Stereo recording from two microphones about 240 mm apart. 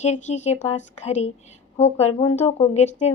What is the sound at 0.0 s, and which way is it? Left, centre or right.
Speech, left.